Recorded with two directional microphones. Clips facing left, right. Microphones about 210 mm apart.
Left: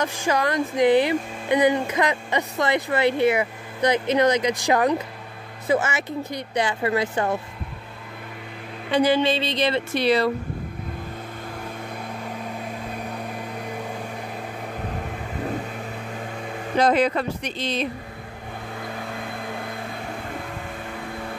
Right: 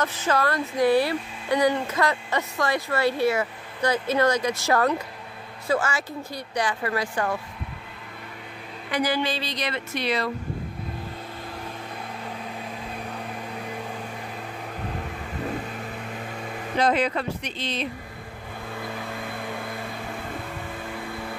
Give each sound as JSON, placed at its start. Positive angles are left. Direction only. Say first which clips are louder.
{"t": 0.0, "sound": "speech", "louder": "left 1 dB", "side_deg": 15}
{"t": 8.9, "sound": "speech", "louder": "left 6 dB", "side_deg": 25}
{"t": 16.8, "sound": "speech", "louder": "left 3 dB", "side_deg": 40}